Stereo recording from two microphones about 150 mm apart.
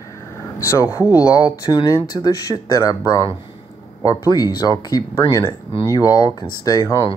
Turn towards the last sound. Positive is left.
turn(degrees=20)  # may be behind; listen again after turning